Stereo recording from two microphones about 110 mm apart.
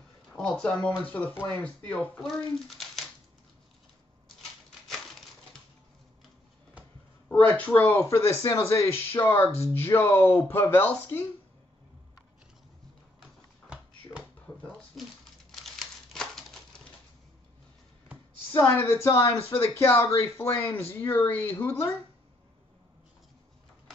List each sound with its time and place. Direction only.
0.4 s speech: 10° left (ahead or behind)
2.2 s speech: centre (ahead or behind)
4.8 s a sound: 5° left (ahead or behind)
7.2 s speech: 15° left (ahead or behind)
13.2 s a sound: 10° right (ahead or behind)
15.5 s typewriter: 5° left (ahead or behind)
18.5 s speech: 20° left (ahead or behind)